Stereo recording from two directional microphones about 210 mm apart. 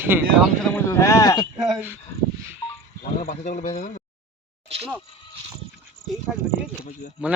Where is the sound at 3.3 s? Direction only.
40° left (ahead or behind).